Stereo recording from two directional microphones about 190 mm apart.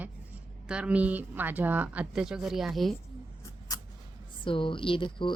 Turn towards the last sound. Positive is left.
turn(degrees=25)  # may be behind; listen again after turning